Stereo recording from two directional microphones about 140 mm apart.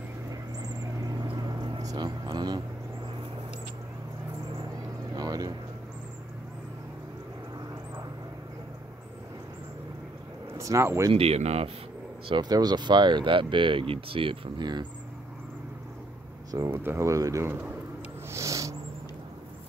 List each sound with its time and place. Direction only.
0.3 s vehicle: 25° right (ahead or behind)
5.1 s vehicle: 25° right (ahead or behind)
10.6 s speech: 20° right (ahead or behind)
11.1 s speech: 50° right (ahead or behind)
12.3 s speech: 30° right (ahead or behind)
16.5 s speech: 20° right (ahead or behind)
18.3 s a sound: 20° right (ahead or behind)